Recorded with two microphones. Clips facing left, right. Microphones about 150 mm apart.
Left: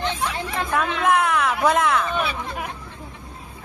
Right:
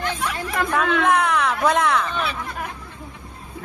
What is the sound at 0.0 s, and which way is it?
Chatter, 25° left (ahead or behind).